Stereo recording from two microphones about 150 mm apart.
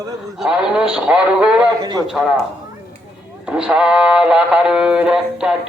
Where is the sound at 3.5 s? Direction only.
5° right (ahead or behind).